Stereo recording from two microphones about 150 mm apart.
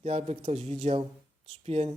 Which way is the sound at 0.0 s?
45° right (ahead or behind).